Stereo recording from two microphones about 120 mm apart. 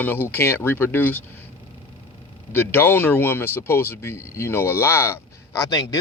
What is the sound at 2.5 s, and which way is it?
Speech, 20° left (ahead or behind).